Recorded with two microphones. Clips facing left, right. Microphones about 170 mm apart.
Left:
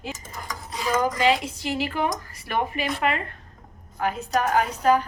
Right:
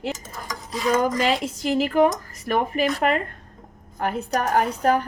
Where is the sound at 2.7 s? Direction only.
45° right (ahead or behind).